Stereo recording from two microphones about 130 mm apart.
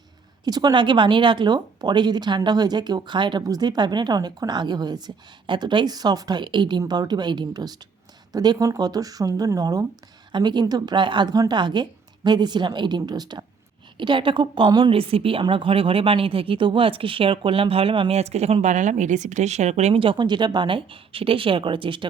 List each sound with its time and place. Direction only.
0.4 s a woman's voice: 30° right (ahead or behind)
18.2 s a woman's voice: 55° right (ahead or behind); by 22.1 s 40° right (ahead or behind)